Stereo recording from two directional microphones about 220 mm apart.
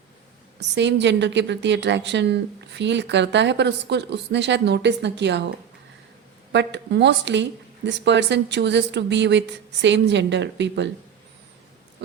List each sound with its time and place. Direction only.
0.7 s a woman's voice: 50° right (ahead or behind)
6.5 s a woman's voice: 55° right (ahead or behind)